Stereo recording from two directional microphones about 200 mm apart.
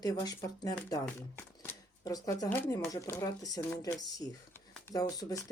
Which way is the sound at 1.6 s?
15° left (ahead or behind).